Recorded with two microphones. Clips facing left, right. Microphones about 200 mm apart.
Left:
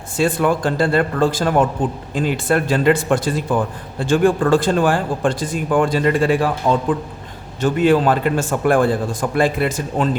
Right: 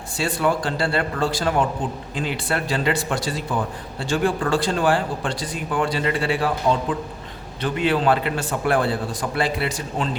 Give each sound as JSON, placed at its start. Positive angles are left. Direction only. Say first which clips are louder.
{"t": 0.2, "sound": "speech", "louder": "left 5 dB", "side_deg": 50}